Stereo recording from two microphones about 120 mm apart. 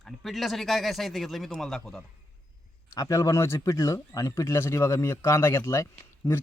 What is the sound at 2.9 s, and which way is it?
Speech, 30° left (ahead or behind).